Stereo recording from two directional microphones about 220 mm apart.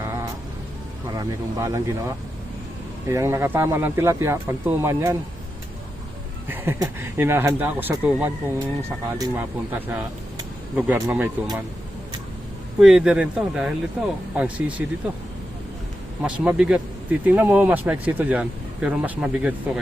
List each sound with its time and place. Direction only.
0.0 s vehicle: 10° right (ahead or behind)
1.1 s speech: 15° right (ahead or behind)
6.5 s speech: 10° right (ahead or behind)
12.8 s speech: 5° right (ahead or behind)
16.2 s speech: 5° right (ahead or behind)